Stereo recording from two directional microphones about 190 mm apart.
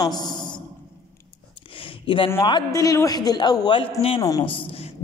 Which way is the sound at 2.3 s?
20° left (ahead or behind).